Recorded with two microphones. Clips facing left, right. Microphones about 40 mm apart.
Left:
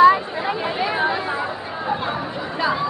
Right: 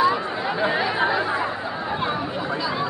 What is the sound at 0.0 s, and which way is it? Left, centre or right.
Chatter, centre.